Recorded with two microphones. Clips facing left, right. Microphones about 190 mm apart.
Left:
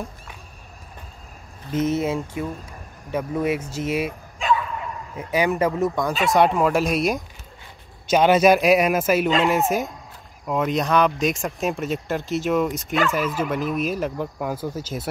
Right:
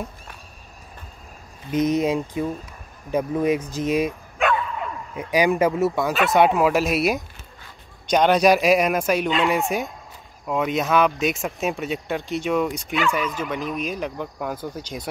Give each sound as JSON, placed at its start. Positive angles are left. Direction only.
{"t": 1.7, "sound": "speech", "side_deg": -15}
{"t": 4.4, "sound": "bow-wow", "side_deg": -60}
{"t": 5.1, "sound": "speech", "side_deg": -15}